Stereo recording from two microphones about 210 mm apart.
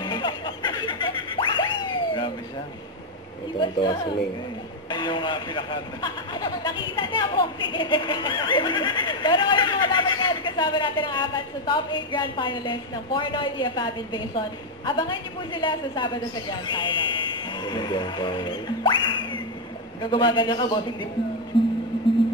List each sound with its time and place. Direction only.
0.0 s music: 20° left (ahead or behind)
3.5 s speech: 20° left (ahead or behind)